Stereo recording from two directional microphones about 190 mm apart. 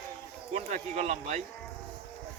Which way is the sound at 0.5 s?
35° right (ahead or behind).